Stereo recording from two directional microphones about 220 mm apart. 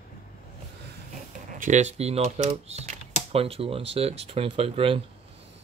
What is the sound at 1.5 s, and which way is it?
Speech, 35° right (ahead or behind).